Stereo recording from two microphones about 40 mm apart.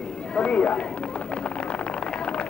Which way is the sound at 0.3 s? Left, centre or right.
Left.